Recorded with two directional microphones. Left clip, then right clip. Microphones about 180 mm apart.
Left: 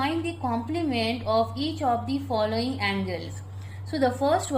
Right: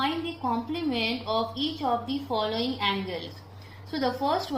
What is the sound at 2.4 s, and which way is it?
Speech, 45° left (ahead or behind).